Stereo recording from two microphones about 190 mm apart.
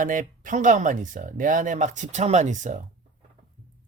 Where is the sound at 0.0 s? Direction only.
45° right (ahead or behind).